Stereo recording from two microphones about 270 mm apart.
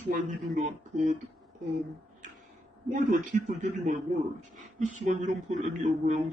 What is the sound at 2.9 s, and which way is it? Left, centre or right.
Speech, right.